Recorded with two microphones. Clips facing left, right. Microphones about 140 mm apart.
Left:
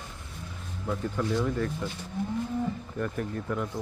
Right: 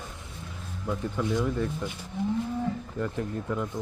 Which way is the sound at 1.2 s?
15° right (ahead or behind).